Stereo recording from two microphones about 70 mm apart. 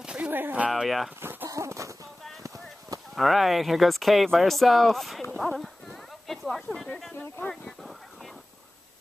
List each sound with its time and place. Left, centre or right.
0.0 s a sound: centre
0.3 s speech: right
0.7 s speech: centre
1.2 s a sound: right
1.5 s music: right
2.4 s clip-clop: right
3.2 s speech: centre
5.4 s clip-clop: centre